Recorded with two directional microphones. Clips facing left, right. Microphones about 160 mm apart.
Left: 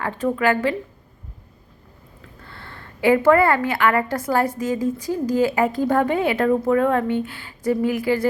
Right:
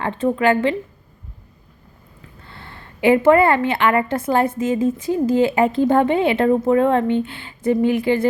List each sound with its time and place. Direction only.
0.0 s a woman's voice: 25° right (ahead or behind)
2.5 s a woman's voice: 20° right (ahead or behind)